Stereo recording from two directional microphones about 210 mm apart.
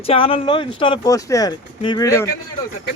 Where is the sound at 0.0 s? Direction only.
25° left (ahead or behind).